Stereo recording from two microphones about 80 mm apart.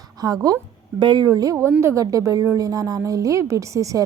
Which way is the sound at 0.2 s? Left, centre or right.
Right.